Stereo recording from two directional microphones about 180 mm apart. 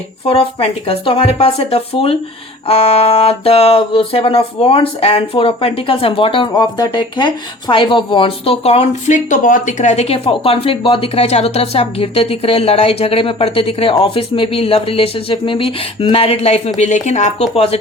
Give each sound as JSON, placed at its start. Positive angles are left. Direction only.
{"t": 0.3, "sound": "music", "side_deg": 35}